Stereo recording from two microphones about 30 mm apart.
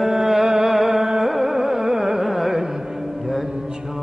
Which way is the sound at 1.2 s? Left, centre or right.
Centre.